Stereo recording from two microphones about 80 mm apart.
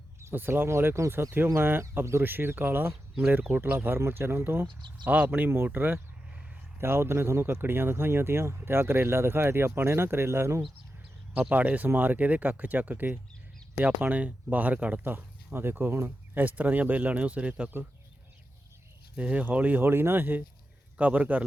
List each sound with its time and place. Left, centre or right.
0.3 s speech: right
1.5 s speech: right
11.3 s speech: centre
19.1 s speech: centre